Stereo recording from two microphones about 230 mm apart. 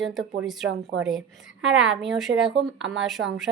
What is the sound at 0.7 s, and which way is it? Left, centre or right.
Speech, right.